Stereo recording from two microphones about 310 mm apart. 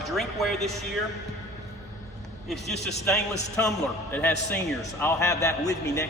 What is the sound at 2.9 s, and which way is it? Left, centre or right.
A man's voice, centre.